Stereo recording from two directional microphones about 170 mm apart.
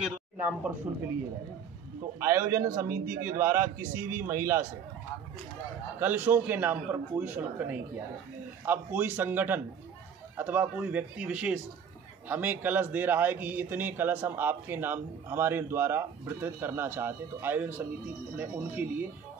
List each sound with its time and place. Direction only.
0.9 s a man's voice: 15° right (ahead or behind)
2.1 s a man's voice: 15° right (ahead or behind)
2.9 s a man's voice: 55° right (ahead or behind)
3.3 s a man's voice: 15° right (ahead or behind)
5.9 s a man's voice: 10° right (ahead or behind)